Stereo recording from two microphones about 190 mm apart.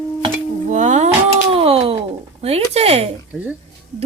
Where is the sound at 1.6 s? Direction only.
30° right (ahead or behind).